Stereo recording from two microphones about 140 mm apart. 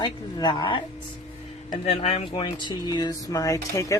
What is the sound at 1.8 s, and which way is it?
Speech, 40° left (ahead or behind).